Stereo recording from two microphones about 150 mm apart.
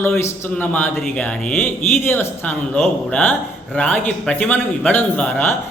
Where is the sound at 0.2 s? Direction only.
15° left (ahead or behind).